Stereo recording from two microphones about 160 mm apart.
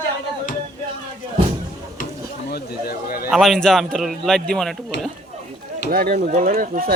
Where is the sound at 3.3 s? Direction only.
Centre (ahead or behind).